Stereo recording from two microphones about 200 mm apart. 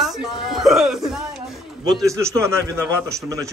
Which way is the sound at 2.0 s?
15° right (ahead or behind).